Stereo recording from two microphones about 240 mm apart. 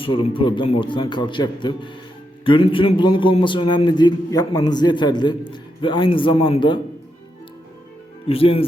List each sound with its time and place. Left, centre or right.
0.0 s a man's voice: left
8.3 s a man's voice: left